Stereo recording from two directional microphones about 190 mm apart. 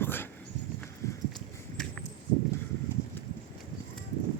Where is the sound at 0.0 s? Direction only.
10° left (ahead or behind).